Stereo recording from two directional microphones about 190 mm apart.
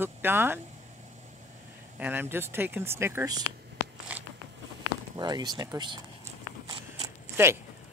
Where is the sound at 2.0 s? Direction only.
10° right (ahead or behind).